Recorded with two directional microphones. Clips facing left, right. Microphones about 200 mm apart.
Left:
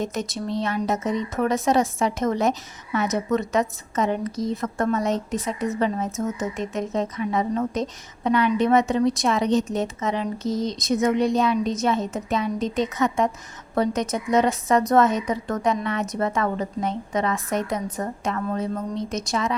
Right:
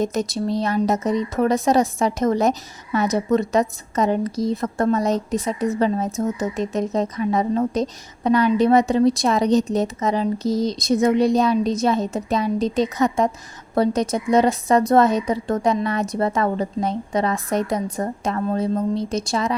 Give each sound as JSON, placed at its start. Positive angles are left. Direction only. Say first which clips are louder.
{"t": 0.0, "sound": "a woman's voice", "louder": "right 5 dB", "side_deg": -40}